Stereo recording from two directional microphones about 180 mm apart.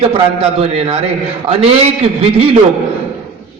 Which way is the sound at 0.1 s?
35° right (ahead or behind).